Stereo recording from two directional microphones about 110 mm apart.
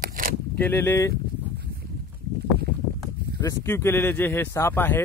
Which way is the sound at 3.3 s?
25° left (ahead or behind).